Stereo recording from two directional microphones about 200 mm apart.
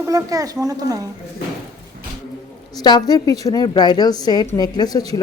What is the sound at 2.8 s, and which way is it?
Speech, 20° left (ahead or behind).